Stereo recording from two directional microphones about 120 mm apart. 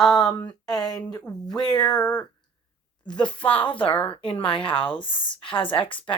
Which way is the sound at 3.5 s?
45° left (ahead or behind).